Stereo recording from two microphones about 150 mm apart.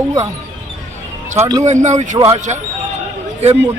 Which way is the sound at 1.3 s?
25° right (ahead or behind).